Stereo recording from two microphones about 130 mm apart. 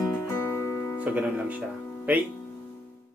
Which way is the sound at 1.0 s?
10° right (ahead or behind).